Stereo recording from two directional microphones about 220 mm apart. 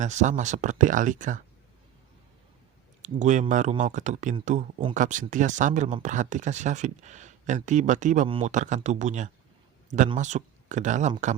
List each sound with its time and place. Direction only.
0.0 s speech: 35° right (ahead or behind)
3.0 s speech: 35° right (ahead or behind)